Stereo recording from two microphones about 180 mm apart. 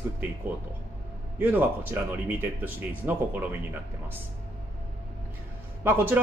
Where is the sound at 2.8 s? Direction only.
10° right (ahead or behind).